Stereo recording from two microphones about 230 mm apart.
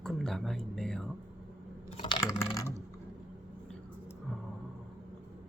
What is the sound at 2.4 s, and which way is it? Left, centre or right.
Ratchet, centre.